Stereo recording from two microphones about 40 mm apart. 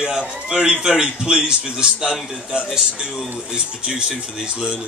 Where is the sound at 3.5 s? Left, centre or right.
Right.